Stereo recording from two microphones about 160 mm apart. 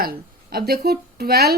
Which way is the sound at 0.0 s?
70° right (ahead or behind).